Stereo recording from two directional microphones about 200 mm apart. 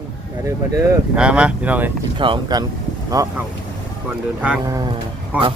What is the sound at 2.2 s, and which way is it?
Speech, 25° right (ahead or behind).